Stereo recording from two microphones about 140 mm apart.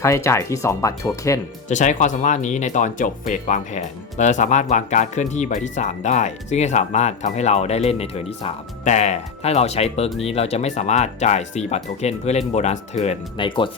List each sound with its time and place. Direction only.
0.0 s speech: 20° left (ahead or behind)
1.7 s speech: 60° left (ahead or behind)
13.4 s speech: 35° left (ahead or behind)